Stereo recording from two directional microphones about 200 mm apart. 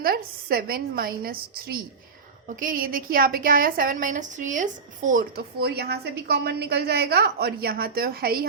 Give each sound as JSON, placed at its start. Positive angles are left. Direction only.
{"t": 0.0, "sound": "a woman's voice", "side_deg": -50}